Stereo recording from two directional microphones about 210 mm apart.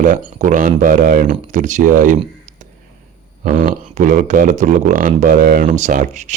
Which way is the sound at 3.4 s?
40° right (ahead or behind).